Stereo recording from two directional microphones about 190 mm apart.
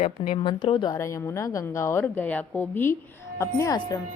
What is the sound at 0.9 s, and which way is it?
Speech, 15° left (ahead or behind).